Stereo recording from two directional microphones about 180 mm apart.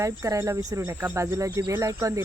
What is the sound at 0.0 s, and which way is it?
Speech, 15° right (ahead or behind).